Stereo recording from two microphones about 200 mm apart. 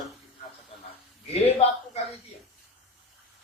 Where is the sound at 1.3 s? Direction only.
30° left (ahead or behind).